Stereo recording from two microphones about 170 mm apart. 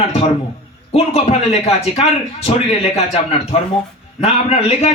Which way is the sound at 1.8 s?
35° left (ahead or behind).